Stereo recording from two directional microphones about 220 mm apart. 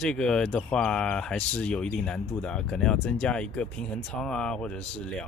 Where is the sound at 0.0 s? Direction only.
5° left (ahead or behind).